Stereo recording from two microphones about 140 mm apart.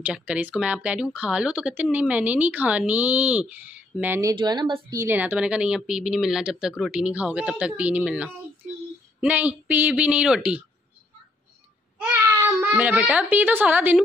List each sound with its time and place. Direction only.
0.0 s speech: 10° right (ahead or behind)
4.3 s speech: 30° right (ahead or behind)
4.9 s speech: 15° right (ahead or behind)
12.0 s child singing: 15° right (ahead or behind)
12.7 s speech: 10° right (ahead or behind)